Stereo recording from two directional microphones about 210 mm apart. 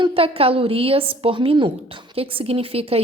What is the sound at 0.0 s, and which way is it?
A woman's voice, 25° right (ahead or behind).